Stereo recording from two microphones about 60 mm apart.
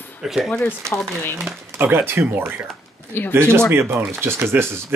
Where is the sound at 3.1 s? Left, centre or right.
Left.